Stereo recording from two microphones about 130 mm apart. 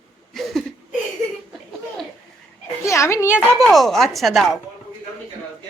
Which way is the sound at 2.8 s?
20° left (ahead or behind).